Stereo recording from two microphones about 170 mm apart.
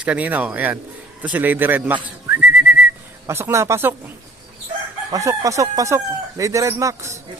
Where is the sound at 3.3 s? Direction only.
15° right (ahead or behind).